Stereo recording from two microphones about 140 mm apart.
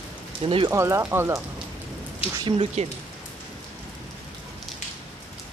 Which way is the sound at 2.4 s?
35° right (ahead or behind).